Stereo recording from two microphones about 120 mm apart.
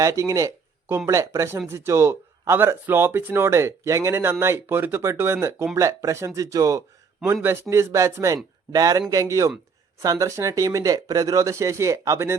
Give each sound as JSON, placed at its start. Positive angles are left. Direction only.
{"t": 0.0, "sound": "speech", "side_deg": -25}